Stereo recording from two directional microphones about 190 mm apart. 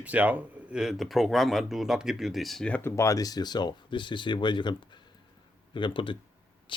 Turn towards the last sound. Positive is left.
turn(degrees=25)  # may be behind; listen again after turning